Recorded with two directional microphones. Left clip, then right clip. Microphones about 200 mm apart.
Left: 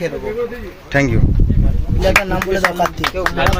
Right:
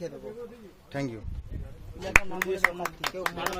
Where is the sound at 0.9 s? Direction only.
Centre (ahead or behind).